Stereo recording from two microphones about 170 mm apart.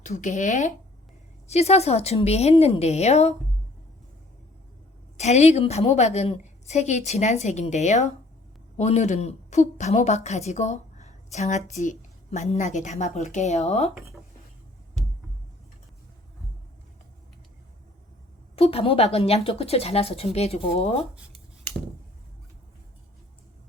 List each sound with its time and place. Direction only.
0.0 s a woman's voice: 45° left (ahead or behind)
5.1 s a woman's voice: 40° left (ahead or behind)
18.5 s a woman's voice: 35° left (ahead or behind)